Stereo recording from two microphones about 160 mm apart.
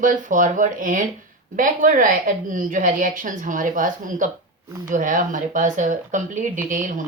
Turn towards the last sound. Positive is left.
turn(degrees=-55)  # may be behind; listen again after turning